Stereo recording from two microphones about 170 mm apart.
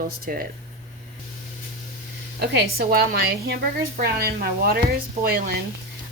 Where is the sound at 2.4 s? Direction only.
65° right (ahead or behind).